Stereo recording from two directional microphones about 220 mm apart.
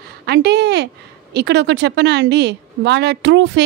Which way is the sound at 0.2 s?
50° right (ahead or behind).